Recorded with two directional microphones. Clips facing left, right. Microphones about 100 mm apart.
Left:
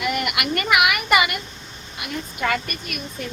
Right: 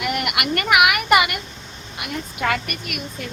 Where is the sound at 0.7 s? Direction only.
50° right (ahead or behind).